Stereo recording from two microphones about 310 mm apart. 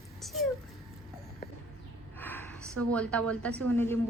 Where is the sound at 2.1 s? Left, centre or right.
Centre.